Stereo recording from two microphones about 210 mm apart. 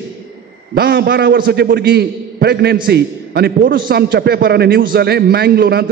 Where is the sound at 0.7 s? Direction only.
45° right (ahead or behind).